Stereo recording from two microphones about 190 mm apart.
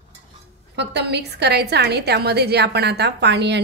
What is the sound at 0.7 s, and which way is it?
A woman's voice, 60° right (ahead or behind).